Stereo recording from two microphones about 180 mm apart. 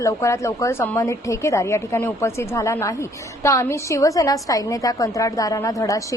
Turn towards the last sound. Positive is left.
turn(degrees=20)  # may be behind; listen again after turning